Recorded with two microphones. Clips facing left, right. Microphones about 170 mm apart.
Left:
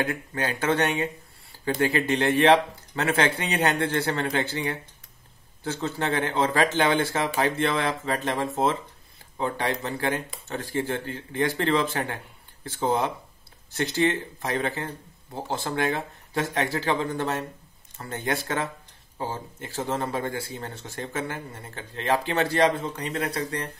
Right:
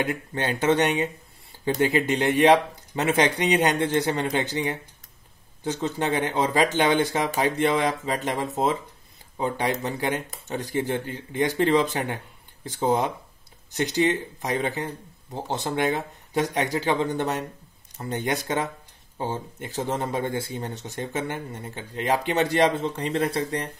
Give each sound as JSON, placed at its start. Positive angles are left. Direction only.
{"t": 0.0, "sound": "speech", "side_deg": -25}